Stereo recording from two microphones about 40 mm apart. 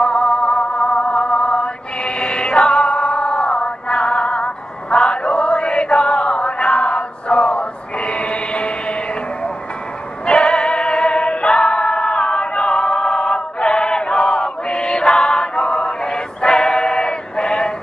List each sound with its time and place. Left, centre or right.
0.0 s music: left
10.2 s music: left